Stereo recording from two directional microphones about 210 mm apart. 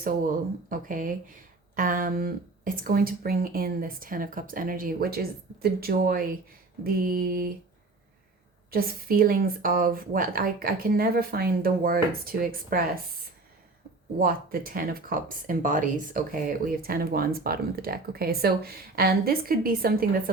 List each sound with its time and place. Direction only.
0.7 s speech: 40° right (ahead or behind)
8.7 s speech: 45° right (ahead or behind)
14.2 s speech: 45° right (ahead or behind)